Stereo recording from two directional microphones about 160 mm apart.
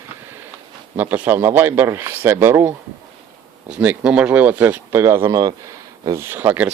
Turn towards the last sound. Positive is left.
turn(degrees=-10)  # may be behind; listen again after turning